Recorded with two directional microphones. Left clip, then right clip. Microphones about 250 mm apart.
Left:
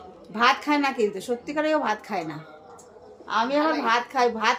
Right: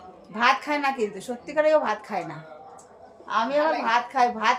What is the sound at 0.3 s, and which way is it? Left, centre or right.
A woman's voice, centre.